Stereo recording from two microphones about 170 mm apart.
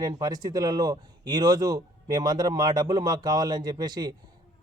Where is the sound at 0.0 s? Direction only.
20° right (ahead or behind).